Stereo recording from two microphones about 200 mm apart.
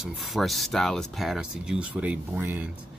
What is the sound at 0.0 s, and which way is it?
Speech, centre (ahead or behind).